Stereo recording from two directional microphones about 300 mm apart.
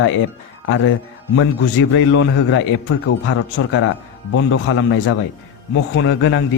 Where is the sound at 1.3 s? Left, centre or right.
Left.